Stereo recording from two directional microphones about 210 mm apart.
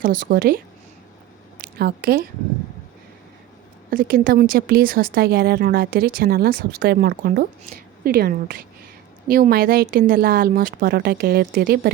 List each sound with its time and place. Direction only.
0.0 s a woman's voice: 40° right (ahead or behind)
3.9 s speech: 45° right (ahead or behind)